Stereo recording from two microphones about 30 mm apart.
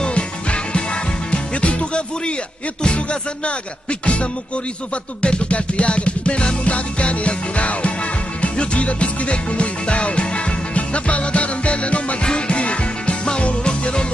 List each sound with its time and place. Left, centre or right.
0.1 s music: left